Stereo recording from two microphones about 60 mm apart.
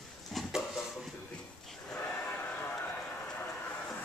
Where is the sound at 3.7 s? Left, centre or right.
Left.